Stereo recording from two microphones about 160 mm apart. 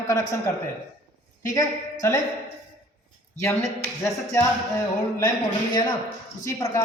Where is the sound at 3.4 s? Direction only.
15° left (ahead or behind).